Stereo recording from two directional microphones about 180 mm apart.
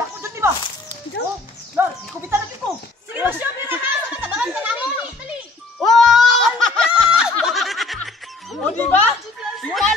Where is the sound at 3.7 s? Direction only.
10° right (ahead or behind).